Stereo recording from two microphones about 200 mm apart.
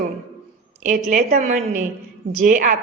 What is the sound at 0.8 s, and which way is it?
A woman's voice, 40° right (ahead or behind).